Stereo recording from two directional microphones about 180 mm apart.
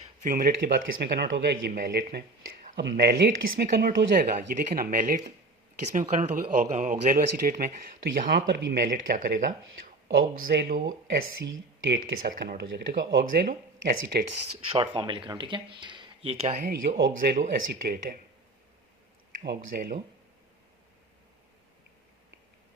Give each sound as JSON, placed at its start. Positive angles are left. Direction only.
{"t": 0.2, "sound": "speech", "side_deg": -50}
{"t": 8.3, "sound": "speech", "side_deg": -70}
{"t": 10.8, "sound": "speech", "side_deg": -90}
{"t": 12.2, "sound": "speech", "side_deg": -55}
{"t": 14.3, "sound": "speech", "side_deg": -30}
{"t": 17.3, "sound": "speech", "side_deg": -55}
{"t": 19.5, "sound": "speech", "side_deg": -60}